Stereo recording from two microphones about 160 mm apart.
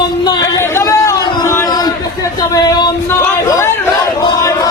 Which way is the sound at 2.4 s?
25° left (ahead or behind).